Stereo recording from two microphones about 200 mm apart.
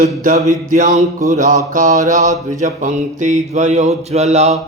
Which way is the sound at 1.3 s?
35° right (ahead or behind).